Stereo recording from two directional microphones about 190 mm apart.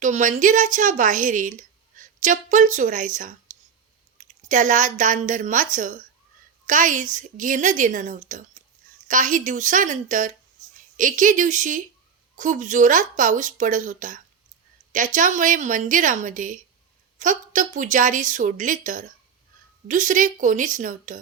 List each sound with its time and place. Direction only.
0.0 s a woman's voice: 40° right (ahead or behind)